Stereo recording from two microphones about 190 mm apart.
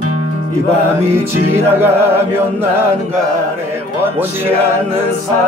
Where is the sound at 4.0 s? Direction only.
10° right (ahead or behind).